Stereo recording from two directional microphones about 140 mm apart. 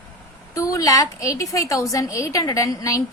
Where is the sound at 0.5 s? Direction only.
25° left (ahead or behind).